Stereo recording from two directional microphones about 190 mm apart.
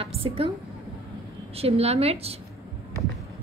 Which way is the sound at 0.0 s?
30° right (ahead or behind).